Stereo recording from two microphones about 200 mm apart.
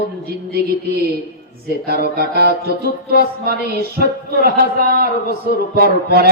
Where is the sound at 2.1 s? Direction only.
50° right (ahead or behind).